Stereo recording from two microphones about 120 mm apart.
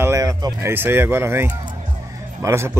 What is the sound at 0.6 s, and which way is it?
A man's voice, 20° right (ahead or behind).